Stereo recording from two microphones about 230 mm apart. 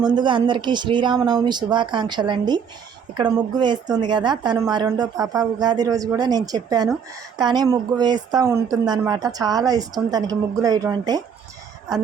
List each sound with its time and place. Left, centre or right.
0.0 s a woman's voice: centre